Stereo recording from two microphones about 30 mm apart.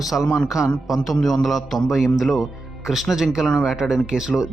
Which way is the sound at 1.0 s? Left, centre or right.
Centre.